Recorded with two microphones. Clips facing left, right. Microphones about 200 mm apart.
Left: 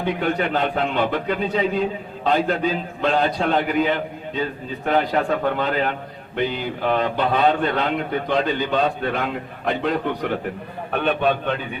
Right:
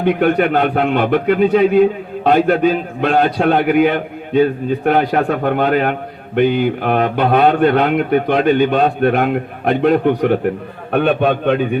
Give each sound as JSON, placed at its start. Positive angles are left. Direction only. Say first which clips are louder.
{"t": 0.0, "sound": "a man's voice", "louder": "right 8 dB", "side_deg": -60}